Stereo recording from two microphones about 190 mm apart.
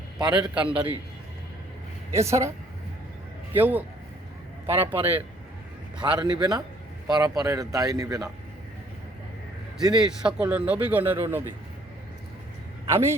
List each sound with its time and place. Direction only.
0.2 s a man's voice: 25° right (ahead or behind)
0.5 s speech: 5° right (ahead or behind)
2.1 s speech: 15° right (ahead or behind)
3.5 s speech: 10° right (ahead or behind)
6.0 s a man's voice: 20° right (ahead or behind)
10.0 s speech: 5° right (ahead or behind)